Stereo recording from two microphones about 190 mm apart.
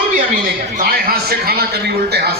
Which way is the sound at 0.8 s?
50° right (ahead or behind).